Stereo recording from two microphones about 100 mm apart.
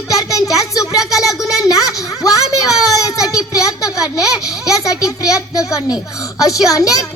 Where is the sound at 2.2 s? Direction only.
35° left (ahead or behind).